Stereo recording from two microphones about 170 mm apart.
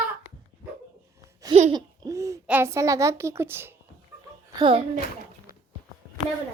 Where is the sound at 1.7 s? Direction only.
20° right (ahead or behind).